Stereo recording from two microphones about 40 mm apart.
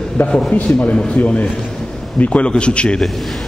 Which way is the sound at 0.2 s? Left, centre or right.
Left.